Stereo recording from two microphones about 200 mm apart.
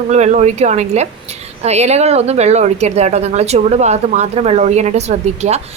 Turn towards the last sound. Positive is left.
turn(degrees=-35)  # may be behind; listen again after turning